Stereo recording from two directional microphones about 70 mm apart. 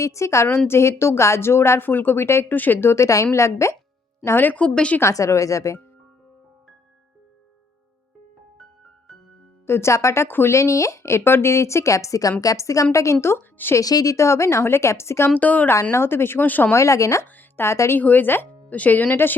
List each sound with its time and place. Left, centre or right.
0.0 s speech: left
1.9 s speech: left
2.9 s a woman's voice: left
4.4 s speech: centre
4.9 s speech: left
9.6 s speech: left
10.2 s speech: left
10.5 s speech: left
13.2 s a woman's voice: left
13.7 s speech: left
15.4 s speech: left
15.7 s speech: left
16.7 s speech: left
18.0 s speech: left